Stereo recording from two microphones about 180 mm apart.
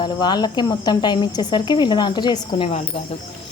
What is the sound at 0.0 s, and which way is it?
Speech, 25° left (ahead or behind).